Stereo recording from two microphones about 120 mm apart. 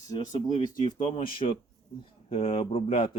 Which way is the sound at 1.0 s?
50° left (ahead or behind).